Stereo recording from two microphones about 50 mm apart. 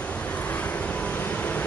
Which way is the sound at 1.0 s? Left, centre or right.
Left.